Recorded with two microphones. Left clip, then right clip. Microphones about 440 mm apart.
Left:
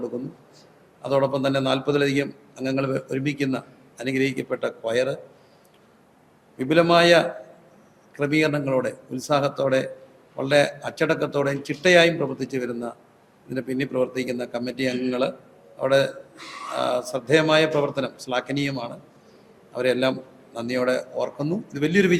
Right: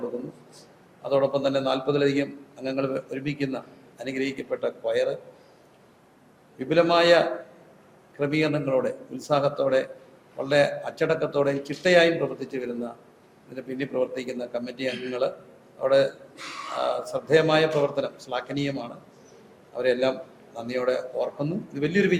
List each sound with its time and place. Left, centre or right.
1.0 s a man's voice: left
6.6 s a man's voice: left